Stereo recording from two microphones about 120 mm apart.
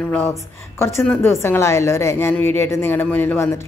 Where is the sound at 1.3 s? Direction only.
20° left (ahead or behind).